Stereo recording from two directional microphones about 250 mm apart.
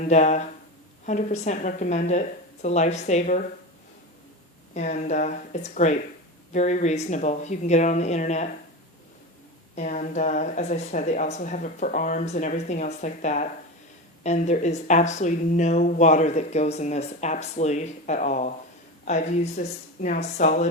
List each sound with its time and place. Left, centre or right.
0.1 s speech: left
4.7 s speech: left
9.7 s speech: left